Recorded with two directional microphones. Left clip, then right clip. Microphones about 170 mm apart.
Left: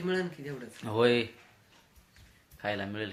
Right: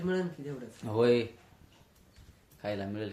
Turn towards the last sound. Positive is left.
turn(degrees=0)  # may be behind; listen again after turning